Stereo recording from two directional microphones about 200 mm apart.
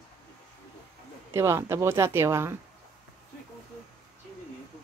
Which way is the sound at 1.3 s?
15° right (ahead or behind).